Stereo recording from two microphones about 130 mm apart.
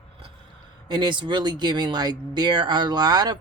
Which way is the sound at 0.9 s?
35° right (ahead or behind).